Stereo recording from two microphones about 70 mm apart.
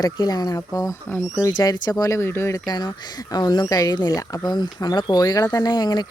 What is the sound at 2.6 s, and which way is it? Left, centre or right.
Speech, left.